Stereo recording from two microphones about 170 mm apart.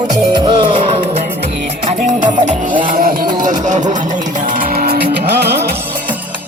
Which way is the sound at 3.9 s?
50° right (ahead or behind).